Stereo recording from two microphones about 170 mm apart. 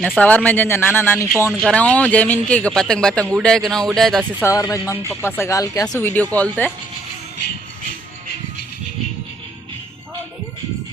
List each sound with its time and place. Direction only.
0.2 s speech: 10° left (ahead or behind)
4.4 s speech: 20° left (ahead or behind)